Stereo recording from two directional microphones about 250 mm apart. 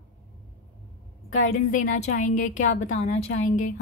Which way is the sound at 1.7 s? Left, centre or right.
Left.